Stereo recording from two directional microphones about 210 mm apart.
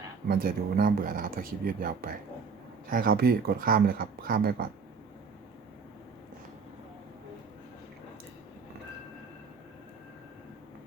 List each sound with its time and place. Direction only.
0.3 s speech: 45° right (ahead or behind)